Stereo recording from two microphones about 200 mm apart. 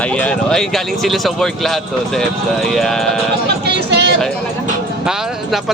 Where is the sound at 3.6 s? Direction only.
60° right (ahead or behind).